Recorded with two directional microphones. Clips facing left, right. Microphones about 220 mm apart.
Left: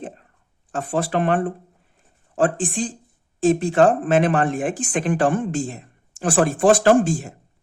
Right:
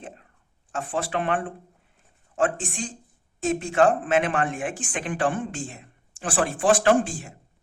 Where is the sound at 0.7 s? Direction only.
40° left (ahead or behind).